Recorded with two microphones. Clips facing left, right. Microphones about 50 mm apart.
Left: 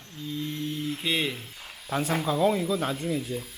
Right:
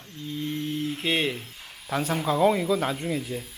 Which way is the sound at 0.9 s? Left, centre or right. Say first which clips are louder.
Right 2 dB; centre.